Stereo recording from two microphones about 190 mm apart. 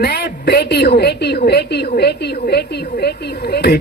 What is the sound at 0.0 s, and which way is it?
A woman's voice, 55° left (ahead or behind).